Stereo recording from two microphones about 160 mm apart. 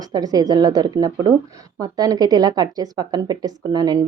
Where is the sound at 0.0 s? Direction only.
25° right (ahead or behind).